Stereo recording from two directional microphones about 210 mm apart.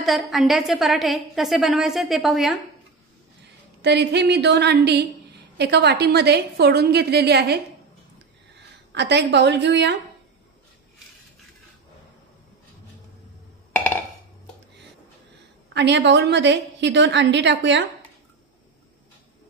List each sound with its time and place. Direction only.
0.0 s a woman's voice: centre (ahead or behind)
3.8 s a woman's voice: 55° right (ahead or behind)
8.9 s a woman's voice: 55° right (ahead or behind)
15.7 s a woman's voice: 55° right (ahead or behind)